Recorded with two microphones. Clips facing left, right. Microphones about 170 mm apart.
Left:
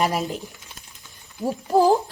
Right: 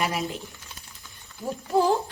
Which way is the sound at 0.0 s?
40° left (ahead or behind).